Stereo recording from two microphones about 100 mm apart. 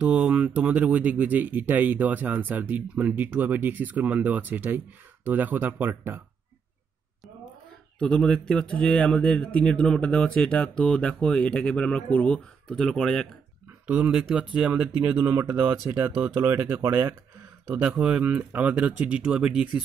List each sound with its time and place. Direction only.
0.0 s speech: 10° right (ahead or behind)
8.0 s speech: 5° left (ahead or behind)
13.8 s speech: 15° right (ahead or behind)